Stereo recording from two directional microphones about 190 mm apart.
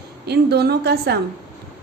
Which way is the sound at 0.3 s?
60° right (ahead or behind).